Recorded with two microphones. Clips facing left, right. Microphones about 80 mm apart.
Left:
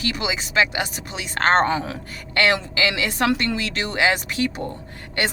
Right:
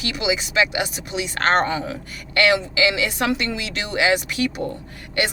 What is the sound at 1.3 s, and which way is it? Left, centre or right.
A woman's voice, left.